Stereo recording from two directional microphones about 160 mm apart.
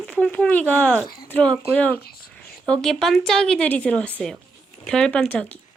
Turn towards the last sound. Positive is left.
turn(degrees=10)  # may be behind; listen again after turning